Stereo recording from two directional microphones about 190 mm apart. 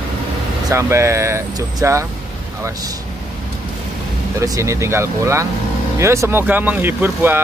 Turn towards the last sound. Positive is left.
turn(degrees=-10)  # may be behind; listen again after turning